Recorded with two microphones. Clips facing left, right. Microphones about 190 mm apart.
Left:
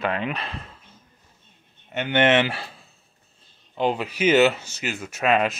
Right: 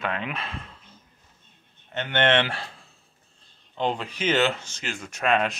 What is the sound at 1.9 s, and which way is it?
Speech, 10° left (ahead or behind).